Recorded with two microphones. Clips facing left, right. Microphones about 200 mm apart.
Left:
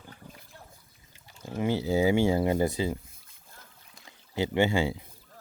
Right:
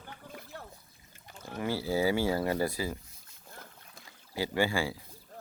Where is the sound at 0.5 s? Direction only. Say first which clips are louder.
Right 6 dB; 75° right (ahead or behind).